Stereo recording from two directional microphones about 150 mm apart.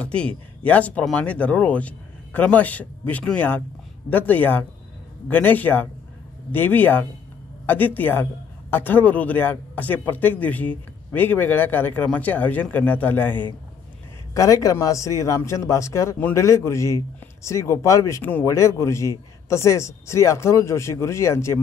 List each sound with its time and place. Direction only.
0.0 s a man's voice: 5° left (ahead or behind)